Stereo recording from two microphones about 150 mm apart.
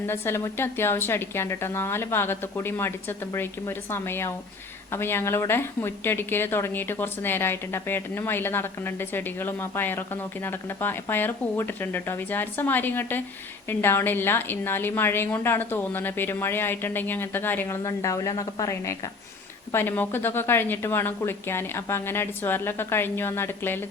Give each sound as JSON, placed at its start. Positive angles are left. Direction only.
{"t": 0.0, "sound": "a woman's voice", "side_deg": 15}